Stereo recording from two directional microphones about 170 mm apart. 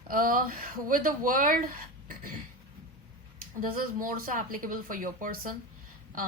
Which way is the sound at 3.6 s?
55° right (ahead or behind).